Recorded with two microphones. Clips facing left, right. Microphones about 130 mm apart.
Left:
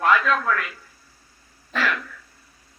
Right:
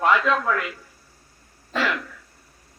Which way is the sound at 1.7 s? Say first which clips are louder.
Right 1 dB; 25° right (ahead or behind).